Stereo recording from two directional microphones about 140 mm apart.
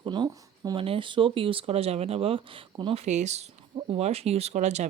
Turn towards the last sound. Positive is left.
turn(degrees=-55)  # may be behind; listen again after turning